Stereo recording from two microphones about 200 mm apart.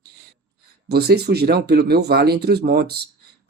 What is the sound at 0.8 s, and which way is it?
Speech, 55° right (ahead or behind).